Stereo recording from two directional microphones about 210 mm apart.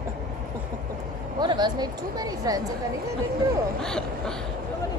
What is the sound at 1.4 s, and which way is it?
Speech, 20° right (ahead or behind).